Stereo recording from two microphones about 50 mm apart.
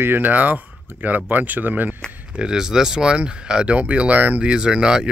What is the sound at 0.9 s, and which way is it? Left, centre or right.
Speech, right.